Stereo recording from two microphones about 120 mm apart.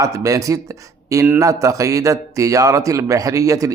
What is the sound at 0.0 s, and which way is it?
Speech, 25° right (ahead or behind).